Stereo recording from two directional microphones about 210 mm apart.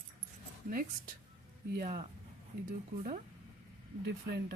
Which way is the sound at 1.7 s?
40° right (ahead or behind).